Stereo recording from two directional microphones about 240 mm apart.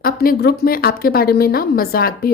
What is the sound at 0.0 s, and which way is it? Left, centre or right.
A woman's voice, left.